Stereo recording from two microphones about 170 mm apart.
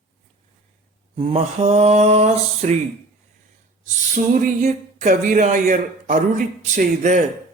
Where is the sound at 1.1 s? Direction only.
35° right (ahead or behind).